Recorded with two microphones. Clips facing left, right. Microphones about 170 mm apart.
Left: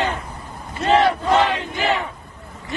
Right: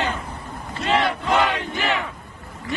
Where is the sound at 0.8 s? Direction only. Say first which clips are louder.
Left 5 dB; 35° left (ahead or behind).